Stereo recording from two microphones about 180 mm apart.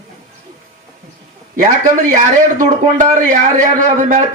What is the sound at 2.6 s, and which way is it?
A man's voice, 45° right (ahead or behind).